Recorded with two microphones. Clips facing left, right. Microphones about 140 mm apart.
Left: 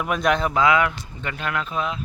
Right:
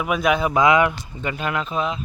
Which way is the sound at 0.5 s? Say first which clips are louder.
Right 3 dB; 20° right (ahead or behind).